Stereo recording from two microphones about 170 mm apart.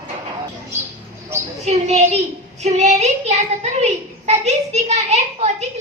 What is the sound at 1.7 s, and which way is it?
A woman's voice, 40° right (ahead or behind).